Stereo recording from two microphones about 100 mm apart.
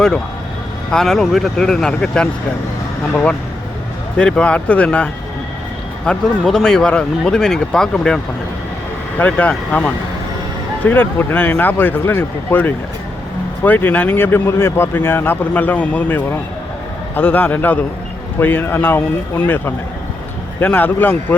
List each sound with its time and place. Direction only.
0.9 s speech: 5° left (ahead or behind)
4.2 s speech: 10° left (ahead or behind)
6.1 s speech: 5° left (ahead or behind)